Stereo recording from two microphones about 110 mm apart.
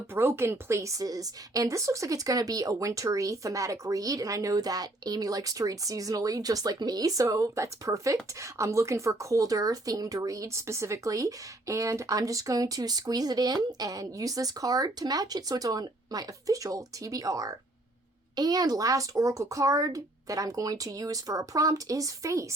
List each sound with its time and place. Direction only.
0.1 s a woman's voice: 20° right (ahead or behind)